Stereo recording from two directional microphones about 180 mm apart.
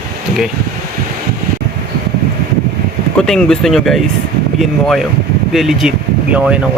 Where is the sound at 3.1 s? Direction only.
5° left (ahead or behind).